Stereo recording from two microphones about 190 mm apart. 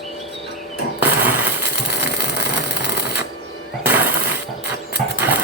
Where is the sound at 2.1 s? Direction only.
60° left (ahead or behind).